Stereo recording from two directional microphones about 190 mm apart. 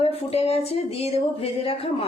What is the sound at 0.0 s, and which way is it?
Speech, 30° left (ahead or behind).